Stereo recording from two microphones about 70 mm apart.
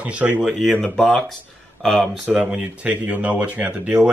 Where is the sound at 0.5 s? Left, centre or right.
Centre.